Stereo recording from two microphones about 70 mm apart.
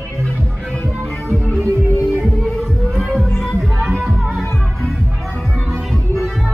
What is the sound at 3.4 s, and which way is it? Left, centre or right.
Music, centre.